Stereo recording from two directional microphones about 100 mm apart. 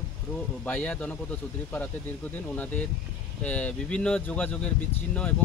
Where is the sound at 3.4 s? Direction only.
15° left (ahead or behind).